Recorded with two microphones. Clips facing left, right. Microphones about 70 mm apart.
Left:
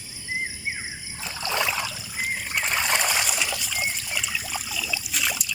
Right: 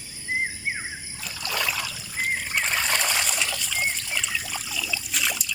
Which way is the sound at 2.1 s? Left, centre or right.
Centre.